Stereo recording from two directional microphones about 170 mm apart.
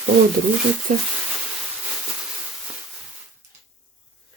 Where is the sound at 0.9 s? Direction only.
50° right (ahead or behind).